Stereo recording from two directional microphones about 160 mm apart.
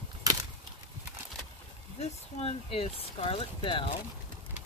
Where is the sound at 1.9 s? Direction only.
35° left (ahead or behind).